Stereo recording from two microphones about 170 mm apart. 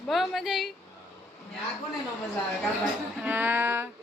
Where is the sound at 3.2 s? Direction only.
10° right (ahead or behind).